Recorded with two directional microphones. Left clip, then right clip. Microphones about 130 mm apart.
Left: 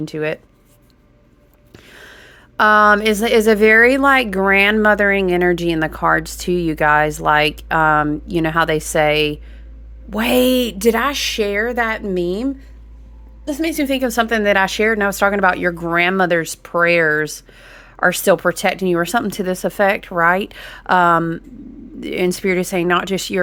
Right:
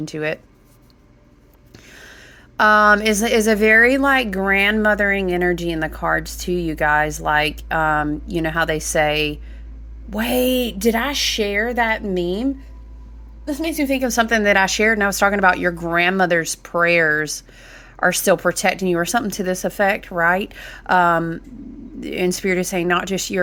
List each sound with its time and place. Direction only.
0.0 s a woman's voice: 20° left (ahead or behind)
1.7 s a woman's voice: 25° left (ahead or behind)
13.5 s a woman's voice: 55° left (ahead or behind)
14.1 s a woman's voice: 20° left (ahead or behind)